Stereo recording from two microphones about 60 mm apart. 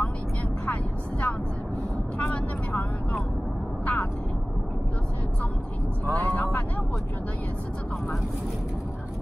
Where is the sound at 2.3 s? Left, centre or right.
Left.